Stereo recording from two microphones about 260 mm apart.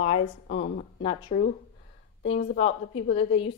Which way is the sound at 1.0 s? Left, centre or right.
Left.